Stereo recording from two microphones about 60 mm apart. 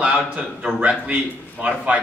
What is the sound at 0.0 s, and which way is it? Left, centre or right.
A man's voice, centre.